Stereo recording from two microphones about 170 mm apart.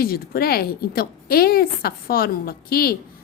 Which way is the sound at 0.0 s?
60° left (ahead or behind).